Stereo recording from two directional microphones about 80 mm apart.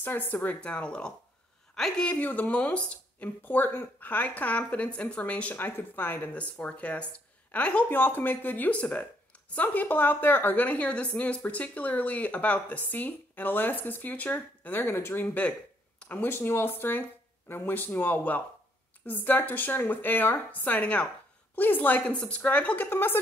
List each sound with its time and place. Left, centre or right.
0.0 s a woman's voice: left